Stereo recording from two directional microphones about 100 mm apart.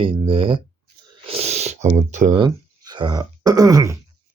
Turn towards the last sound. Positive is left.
turn(degrees=-35)  # may be behind; listen again after turning